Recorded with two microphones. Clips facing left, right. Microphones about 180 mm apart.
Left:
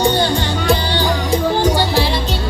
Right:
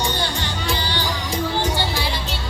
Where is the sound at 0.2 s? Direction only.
35° left (ahead or behind).